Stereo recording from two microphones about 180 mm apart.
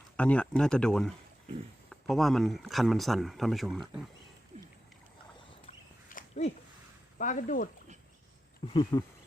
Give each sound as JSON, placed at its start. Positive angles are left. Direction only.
{"t": 0.2, "sound": "speech", "side_deg": 5}
{"t": 4.5, "sound": "rowboat", "side_deg": -40}
{"t": 6.1, "sound": "a sound", "side_deg": 40}
{"t": 7.2, "sound": "speech", "side_deg": 45}
{"t": 8.6, "sound": "speech", "side_deg": 25}